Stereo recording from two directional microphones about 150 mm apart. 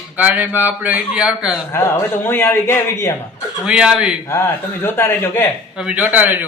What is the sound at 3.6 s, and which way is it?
Speech, 5° right (ahead or behind).